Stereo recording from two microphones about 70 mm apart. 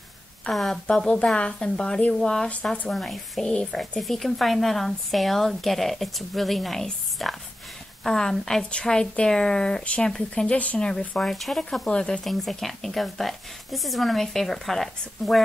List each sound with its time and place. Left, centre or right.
0.5 s speech: centre